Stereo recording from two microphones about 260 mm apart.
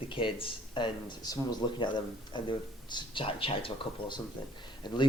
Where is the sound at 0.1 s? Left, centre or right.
Centre.